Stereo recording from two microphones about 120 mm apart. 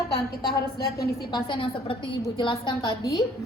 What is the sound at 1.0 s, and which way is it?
A woman's voice, 40° left (ahead or behind).